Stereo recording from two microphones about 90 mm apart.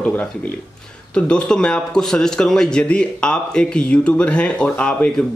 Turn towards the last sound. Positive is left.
turn(degrees=15)  # may be behind; listen again after turning